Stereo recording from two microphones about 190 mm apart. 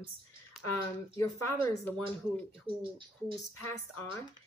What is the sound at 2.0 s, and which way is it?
Speech, 25° right (ahead or behind).